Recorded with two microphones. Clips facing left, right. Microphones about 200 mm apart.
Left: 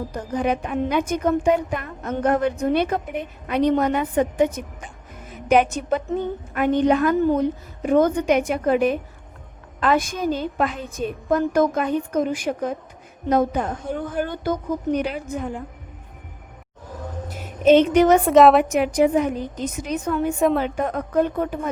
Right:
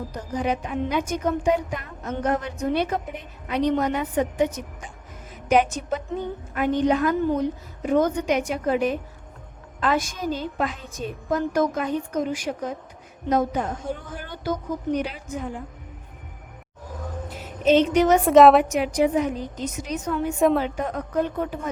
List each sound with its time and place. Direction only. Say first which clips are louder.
0.1 s a woman's voice: left 3 dB; 55° left (ahead or behind)
17.2 s a sound: left 5 dB; 55° left (ahead or behind)
18.3 s a woman's voice: right 3 dB; centre (ahead or behind)
18.7 s a woman's voice: left 3 dB; 50° left (ahead or behind)